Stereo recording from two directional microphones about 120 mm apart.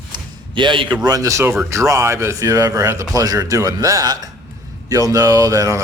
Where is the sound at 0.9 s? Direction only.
35° right (ahead or behind).